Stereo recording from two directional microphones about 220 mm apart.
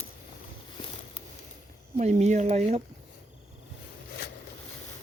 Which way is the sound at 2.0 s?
30° right (ahead or behind).